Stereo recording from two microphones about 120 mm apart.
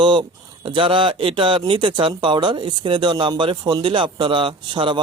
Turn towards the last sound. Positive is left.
turn(degrees=-40)  # may be behind; listen again after turning